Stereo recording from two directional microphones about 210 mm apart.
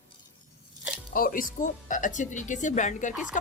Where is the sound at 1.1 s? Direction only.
40° left (ahead or behind).